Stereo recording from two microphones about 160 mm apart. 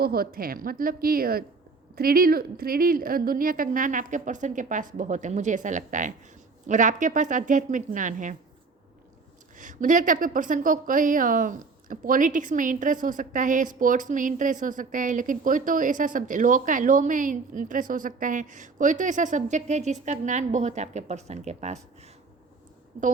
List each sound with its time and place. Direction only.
0.0 s a woman's voice: 70° right (ahead or behind); by 8.4 s 55° right (ahead or behind)
9.6 s a woman's voice: 55° right (ahead or behind)